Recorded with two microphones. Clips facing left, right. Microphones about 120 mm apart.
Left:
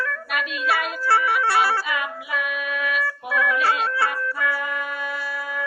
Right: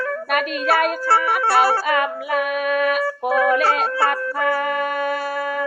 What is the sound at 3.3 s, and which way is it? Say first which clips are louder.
Music: right 4 dB; 40° right (ahead or behind).